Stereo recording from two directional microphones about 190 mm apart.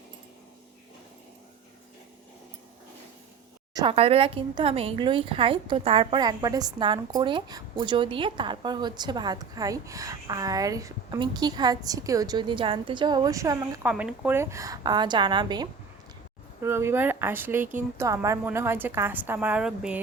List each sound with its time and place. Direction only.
3.8 s a woman's voice: 30° right (ahead or behind)
13.9 s a woman's voice: 5° right (ahead or behind)